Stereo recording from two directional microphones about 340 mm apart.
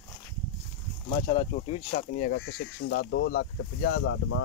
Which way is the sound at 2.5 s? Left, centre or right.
Left.